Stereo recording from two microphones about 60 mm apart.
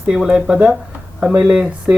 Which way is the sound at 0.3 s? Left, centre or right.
Centre.